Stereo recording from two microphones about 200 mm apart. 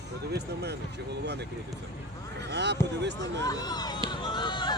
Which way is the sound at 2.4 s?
60° right (ahead or behind).